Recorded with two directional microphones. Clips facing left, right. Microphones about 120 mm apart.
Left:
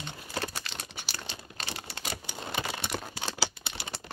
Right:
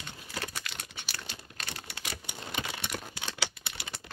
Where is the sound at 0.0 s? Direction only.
30° left (ahead or behind).